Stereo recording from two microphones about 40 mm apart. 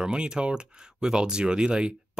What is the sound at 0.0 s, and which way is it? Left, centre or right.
Speech, right.